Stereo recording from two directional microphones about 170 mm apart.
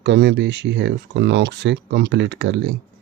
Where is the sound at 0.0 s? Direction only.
90° right.